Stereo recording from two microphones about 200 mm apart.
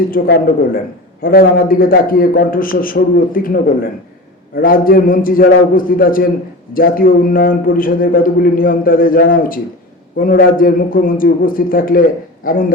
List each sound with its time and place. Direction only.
0.1 s a man's voice: 45° left (ahead or behind)